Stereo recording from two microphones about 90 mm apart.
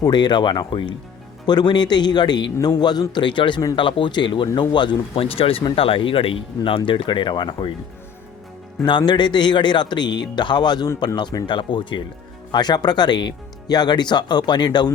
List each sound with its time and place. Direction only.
0.0 s speech: 55° left (ahead or behind)
1.5 s speech: 55° left (ahead or behind)
8.8 s speech: 55° left (ahead or behind)
12.5 s speech: 50° left (ahead or behind)